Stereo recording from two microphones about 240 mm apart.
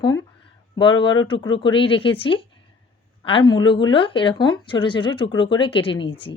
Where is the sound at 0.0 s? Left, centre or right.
Centre.